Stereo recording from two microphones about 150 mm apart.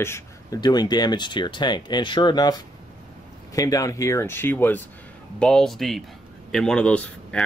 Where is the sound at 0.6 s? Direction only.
25° left (ahead or behind).